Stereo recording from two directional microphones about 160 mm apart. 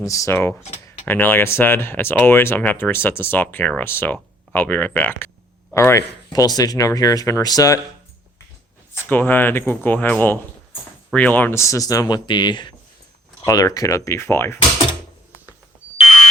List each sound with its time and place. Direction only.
0.0 s speech: 20° left (ahead or behind)
9.0 s speech: 10° left (ahead or behind)